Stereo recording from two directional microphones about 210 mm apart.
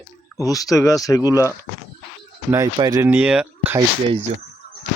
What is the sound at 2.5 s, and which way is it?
Speech, 15° right (ahead or behind).